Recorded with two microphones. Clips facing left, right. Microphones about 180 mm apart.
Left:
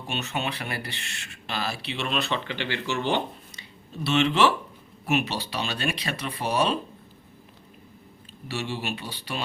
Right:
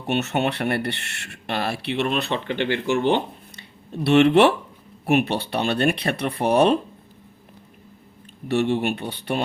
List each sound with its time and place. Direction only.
0.1 s speech: 65° right (ahead or behind)
8.4 s speech: 60° right (ahead or behind)